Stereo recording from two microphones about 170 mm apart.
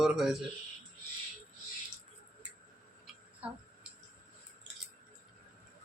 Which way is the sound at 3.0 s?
5° right (ahead or behind).